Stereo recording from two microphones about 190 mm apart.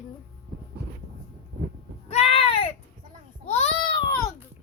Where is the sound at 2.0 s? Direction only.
30° left (ahead or behind).